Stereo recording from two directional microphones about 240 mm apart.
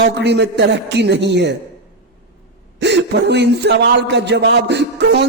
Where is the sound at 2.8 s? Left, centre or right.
Right.